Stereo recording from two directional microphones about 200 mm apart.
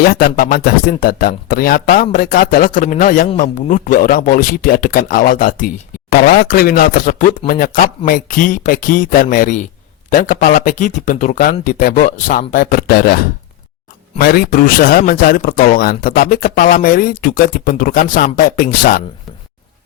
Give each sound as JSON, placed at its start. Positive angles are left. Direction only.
{"t": 0.1, "sound": "speech", "side_deg": 45}
{"t": 14.2, "sound": "speech", "side_deg": 50}